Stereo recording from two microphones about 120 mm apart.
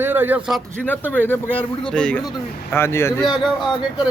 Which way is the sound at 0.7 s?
15° left (ahead or behind).